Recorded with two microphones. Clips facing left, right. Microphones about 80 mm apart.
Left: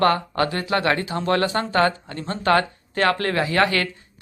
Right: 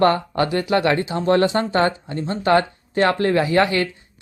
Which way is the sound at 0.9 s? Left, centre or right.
Right.